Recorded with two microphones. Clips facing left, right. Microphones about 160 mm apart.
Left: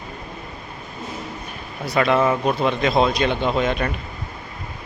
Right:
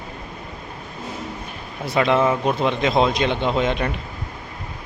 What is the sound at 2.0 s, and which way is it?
Speech, 20° right (ahead or behind).